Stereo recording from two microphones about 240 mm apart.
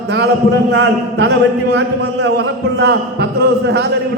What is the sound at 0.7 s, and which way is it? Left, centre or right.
A man's voice, right.